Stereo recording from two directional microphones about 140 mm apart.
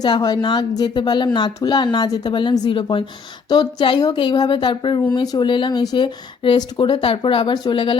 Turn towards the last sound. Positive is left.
turn(degrees=35)  # may be behind; listen again after turning